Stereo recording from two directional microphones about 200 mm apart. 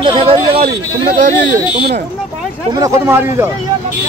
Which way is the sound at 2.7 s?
15° right (ahead or behind).